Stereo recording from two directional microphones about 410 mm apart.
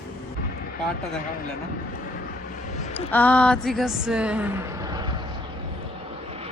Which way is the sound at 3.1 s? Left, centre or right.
Centre.